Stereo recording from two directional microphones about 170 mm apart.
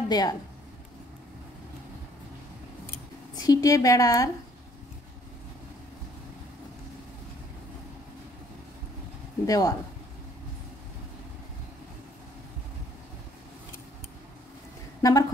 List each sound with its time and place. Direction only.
0.1 s a woman's voice: 25° left (ahead or behind)
3.3 s a woman's voice: 20° left (ahead or behind)
9.5 s a woman's voice: 20° left (ahead or behind)
15.0 s a woman's voice: 20° left (ahead or behind)